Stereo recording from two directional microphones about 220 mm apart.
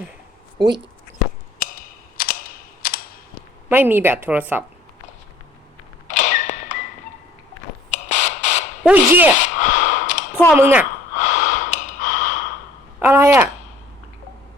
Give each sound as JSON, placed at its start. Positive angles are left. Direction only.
{"t": 1.5, "sound": "cap gun", "side_deg": 40}
{"t": 3.7, "sound": "speech", "side_deg": -10}
{"t": 6.1, "sound": "a sound", "side_deg": 35}
{"t": 7.9, "sound": "a sound", "side_deg": 30}
{"t": 8.8, "sound": "speech", "side_deg": -5}
{"t": 9.3, "sound": "sigh", "side_deg": 35}
{"t": 10.6, "sound": "speech", "side_deg": -10}
{"t": 11.2, "sound": "breathing", "side_deg": 35}
{"t": 13.0, "sound": "speech", "side_deg": -10}